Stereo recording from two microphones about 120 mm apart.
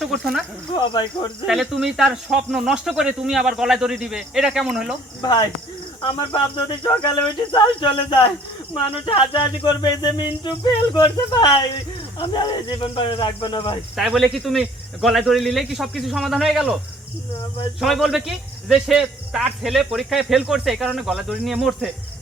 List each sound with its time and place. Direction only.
0.0 s speech: centre (ahead or behind)
1.5 s speech: centre (ahead or behind)
5.2 s a sound: 35° left (ahead or behind)
6.0 s cricket: 45° left (ahead or behind)
9.0 s a sound: 50° left (ahead or behind)
12.2 s cricket: 35° left (ahead or behind)
13.9 s speech: 5° right (ahead or behind)
17.7 s speech: centre (ahead or behind)